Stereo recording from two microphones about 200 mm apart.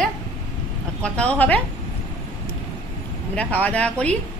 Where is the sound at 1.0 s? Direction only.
5° left (ahead or behind).